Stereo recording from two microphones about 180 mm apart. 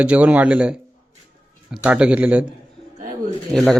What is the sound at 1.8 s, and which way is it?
Speech, 5° right (ahead or behind).